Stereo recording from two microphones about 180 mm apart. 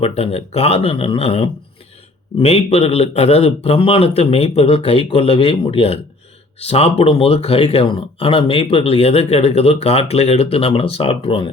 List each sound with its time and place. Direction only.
0.0 s speech: 35° left (ahead or behind)